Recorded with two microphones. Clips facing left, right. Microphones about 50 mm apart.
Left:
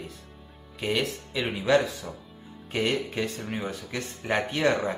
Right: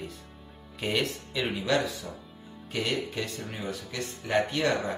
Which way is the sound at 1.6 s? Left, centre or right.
Centre.